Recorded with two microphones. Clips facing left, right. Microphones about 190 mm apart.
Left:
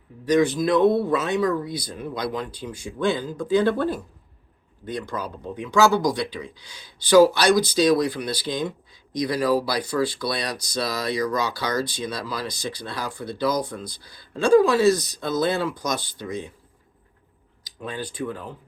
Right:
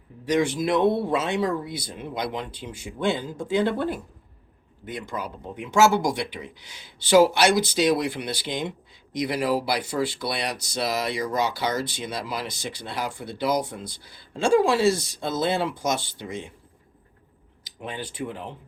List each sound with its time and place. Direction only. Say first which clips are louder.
0.3 s speech: left 3 dB; 25° right (ahead or behind)
4.9 s speech: left 2 dB; 20° right (ahead or behind)
17.7 s speech: left 2 dB; 20° right (ahead or behind)